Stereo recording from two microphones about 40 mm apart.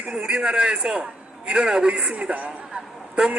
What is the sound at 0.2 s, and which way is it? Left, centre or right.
A man's voice, right.